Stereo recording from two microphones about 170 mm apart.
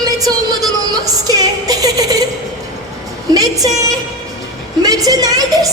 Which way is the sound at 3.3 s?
20° right (ahead or behind).